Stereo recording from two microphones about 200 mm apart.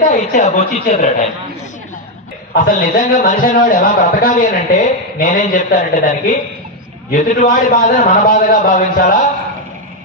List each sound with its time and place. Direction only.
0.1 s a man's voice: 35° left (ahead or behind)
2.5 s a man's voice: 50° left (ahead or behind)